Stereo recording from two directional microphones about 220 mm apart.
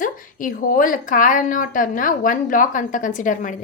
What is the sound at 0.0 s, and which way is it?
A woman's voice, 40° left (ahead or behind).